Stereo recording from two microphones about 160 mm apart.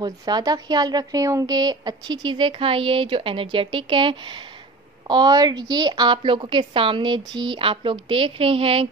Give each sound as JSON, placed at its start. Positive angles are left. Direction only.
{"t": 0.0, "sound": "a woman's voice", "side_deg": -25}